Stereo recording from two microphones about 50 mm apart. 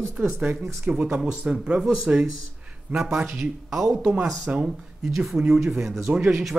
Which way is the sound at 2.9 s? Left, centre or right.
Centre.